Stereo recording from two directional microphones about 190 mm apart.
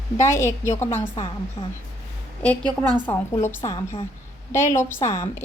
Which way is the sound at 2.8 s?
20° right (ahead or behind).